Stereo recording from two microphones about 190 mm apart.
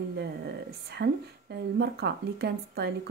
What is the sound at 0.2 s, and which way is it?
Speech, 60° right (ahead or behind).